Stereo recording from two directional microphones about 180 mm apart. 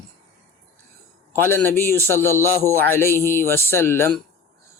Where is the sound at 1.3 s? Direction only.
10° left (ahead or behind).